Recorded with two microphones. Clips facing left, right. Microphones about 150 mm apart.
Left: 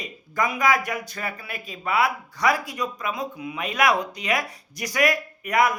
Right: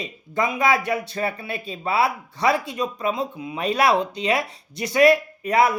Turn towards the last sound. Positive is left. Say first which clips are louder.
# right 3 dB
turn(degrees=-30)  # may be behind; listen again after turning